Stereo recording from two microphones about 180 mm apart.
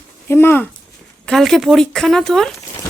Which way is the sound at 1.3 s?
Centre (ahead or behind).